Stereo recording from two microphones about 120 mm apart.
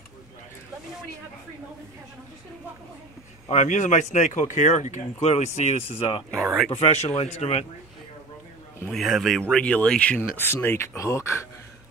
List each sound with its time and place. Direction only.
3.4 s speech: 90° left; by 5.5 s 70° left (ahead or behind)
5.6 s speech: 60° left (ahead or behind)
8.9 s speech: centre (ahead or behind); by 11.4 s 25° left (ahead or behind)